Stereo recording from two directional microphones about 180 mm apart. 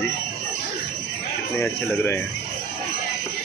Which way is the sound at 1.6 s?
15° left (ahead or behind).